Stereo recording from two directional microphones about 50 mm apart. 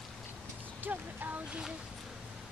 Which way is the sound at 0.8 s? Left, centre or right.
Right.